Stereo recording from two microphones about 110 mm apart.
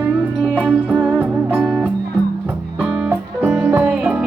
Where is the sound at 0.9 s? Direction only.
15° right (ahead or behind).